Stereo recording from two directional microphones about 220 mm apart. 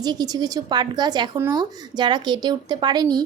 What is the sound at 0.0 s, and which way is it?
A woman's voice, 20° right (ahead or behind).